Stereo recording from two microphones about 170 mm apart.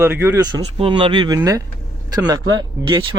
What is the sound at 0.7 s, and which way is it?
Speech, 30° right (ahead or behind).